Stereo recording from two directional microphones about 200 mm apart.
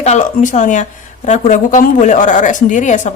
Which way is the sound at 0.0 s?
35° left (ahead or behind).